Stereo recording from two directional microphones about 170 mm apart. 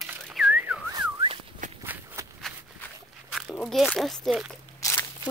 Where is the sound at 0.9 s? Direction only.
30° right (ahead or behind).